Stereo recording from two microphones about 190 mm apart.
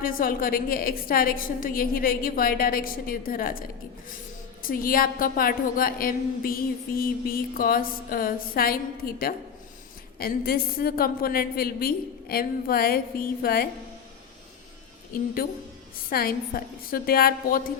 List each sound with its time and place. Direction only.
0.0 s a woman's voice: 50° left (ahead or behind)
15.1 s a woman's voice: 50° left (ahead or behind)